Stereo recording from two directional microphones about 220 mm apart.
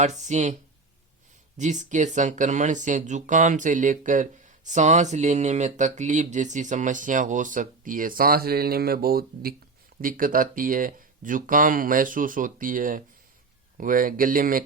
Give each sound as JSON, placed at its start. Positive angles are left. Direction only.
{"t": 0.0, "sound": "speech", "side_deg": -30}
{"t": 1.5, "sound": "speech", "side_deg": -35}